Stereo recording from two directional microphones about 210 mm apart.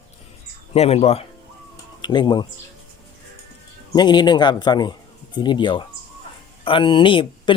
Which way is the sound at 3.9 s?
20° left (ahead or behind).